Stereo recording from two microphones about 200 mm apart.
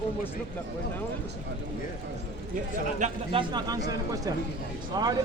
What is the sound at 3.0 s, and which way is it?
Speech, 25° right (ahead or behind).